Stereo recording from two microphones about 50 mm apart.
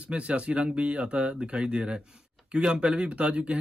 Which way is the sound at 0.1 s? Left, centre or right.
Right.